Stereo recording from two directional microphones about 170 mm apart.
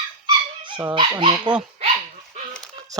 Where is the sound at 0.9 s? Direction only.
30° right (ahead or behind).